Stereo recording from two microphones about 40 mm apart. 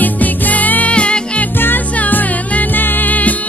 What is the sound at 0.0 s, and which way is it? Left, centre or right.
Music, left.